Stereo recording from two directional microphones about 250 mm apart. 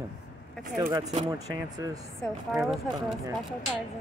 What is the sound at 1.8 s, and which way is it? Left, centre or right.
Speech, centre.